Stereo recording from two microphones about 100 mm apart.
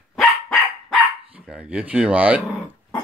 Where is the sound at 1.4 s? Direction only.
10° right (ahead or behind).